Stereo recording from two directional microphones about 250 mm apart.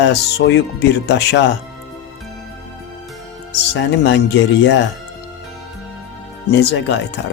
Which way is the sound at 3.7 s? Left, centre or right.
Left.